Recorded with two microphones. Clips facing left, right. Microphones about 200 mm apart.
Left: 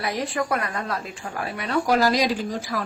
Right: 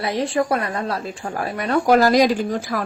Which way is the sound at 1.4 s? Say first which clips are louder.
Right 4 dB; 45° right (ahead or behind).